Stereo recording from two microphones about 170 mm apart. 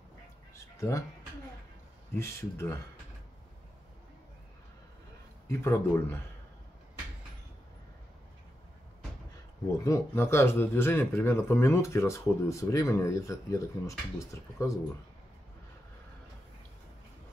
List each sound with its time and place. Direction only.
0.7 s speech: 20° left (ahead or behind)
2.1 s speech: 15° left (ahead or behind)
5.5 s speech: 15° left (ahead or behind)
9.8 s speech: 15° left (ahead or behind)